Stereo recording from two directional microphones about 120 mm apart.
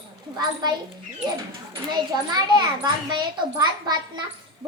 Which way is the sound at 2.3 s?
35° right (ahead or behind).